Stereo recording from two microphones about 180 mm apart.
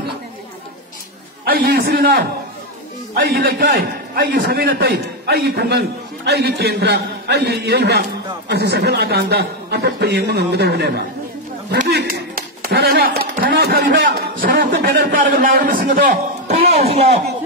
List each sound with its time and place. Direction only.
1.4 s a man's voice: 55° right (ahead or behind)
12.1 s a sound: 55° right (ahead or behind)
14.0 s a man's voice: 90° right
14.4 s a man's voice: 50° right (ahead or behind)
16.7 s a man's voice: 35° right (ahead or behind)